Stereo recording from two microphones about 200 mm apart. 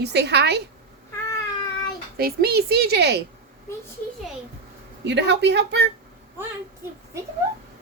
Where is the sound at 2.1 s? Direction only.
50° right (ahead or behind).